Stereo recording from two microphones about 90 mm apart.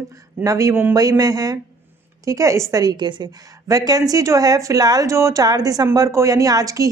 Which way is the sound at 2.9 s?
55° right (ahead or behind).